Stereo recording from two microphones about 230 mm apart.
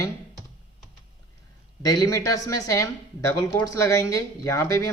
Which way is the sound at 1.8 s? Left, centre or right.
Centre.